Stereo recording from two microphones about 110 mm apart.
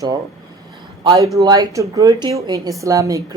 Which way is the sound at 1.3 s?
35° right (ahead or behind).